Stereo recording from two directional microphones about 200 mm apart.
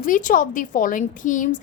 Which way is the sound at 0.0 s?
40° left (ahead or behind).